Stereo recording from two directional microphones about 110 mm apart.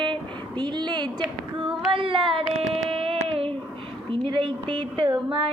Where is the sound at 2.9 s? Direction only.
60° right (ahead or behind).